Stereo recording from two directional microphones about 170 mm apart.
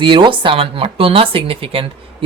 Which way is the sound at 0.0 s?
30° right (ahead or behind).